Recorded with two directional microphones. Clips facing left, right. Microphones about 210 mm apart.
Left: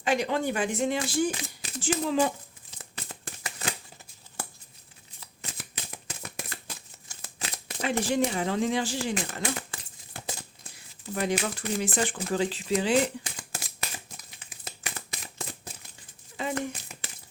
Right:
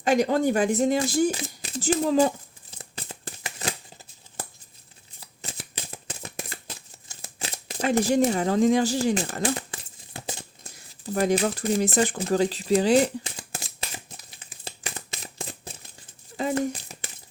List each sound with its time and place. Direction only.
0.0 s speech: 40° right (ahead or behind)
2.7 s a sound: 30° right (ahead or behind)
5.2 s shuffling cards: 35° right (ahead or behind)
7.1 s crumpling: 30° right (ahead or behind)
7.9 s speech: 45° right (ahead or behind)
9.7 s crumpling: 20° right (ahead or behind)
10.6 s a sound: 40° right (ahead or behind)
12.0 s speech: 40° right (ahead or behind)
13.8 s a sound: 30° right (ahead or behind)
16.4 s speech: 40° right (ahead or behind)